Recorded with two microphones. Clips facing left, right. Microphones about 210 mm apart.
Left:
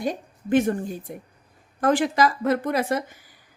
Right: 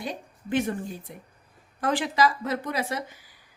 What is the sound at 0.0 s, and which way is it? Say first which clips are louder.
A woman's voice: left 7 dB; 45° left (ahead or behind).